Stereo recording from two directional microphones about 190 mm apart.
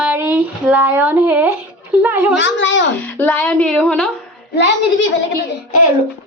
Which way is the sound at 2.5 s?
75° left (ahead or behind).